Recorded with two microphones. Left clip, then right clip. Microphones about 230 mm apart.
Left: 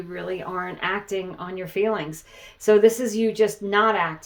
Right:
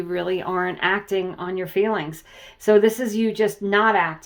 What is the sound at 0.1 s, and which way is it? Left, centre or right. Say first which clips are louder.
Speech: right 5 dB; right.